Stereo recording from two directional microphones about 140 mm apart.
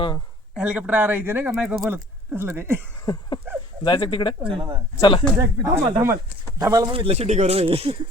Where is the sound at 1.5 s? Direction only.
5° right (ahead or behind).